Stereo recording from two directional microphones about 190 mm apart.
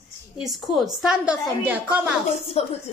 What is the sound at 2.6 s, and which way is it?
Speech, 30° left (ahead or behind).